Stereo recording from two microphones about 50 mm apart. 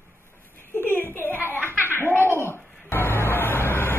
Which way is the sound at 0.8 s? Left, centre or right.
Left.